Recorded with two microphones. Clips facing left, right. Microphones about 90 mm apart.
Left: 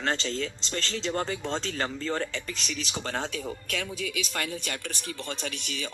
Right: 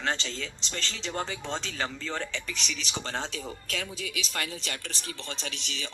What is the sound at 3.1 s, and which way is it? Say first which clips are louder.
Speech: left 3 dB; 55° left (ahead or behind).